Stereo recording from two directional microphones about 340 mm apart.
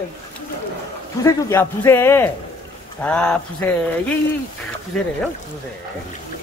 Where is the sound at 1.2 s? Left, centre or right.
Centre.